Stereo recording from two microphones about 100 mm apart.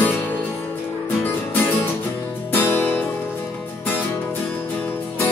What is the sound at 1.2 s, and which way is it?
Music, 15° left (ahead or behind).